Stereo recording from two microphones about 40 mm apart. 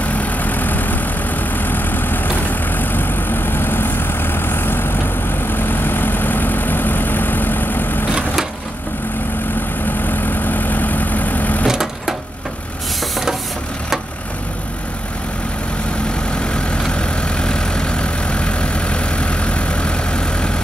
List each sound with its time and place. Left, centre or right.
0.0 s vehicle: left
10.0 s vehicle: left
11.6 s vehicle: centre
16.3 s vehicle: left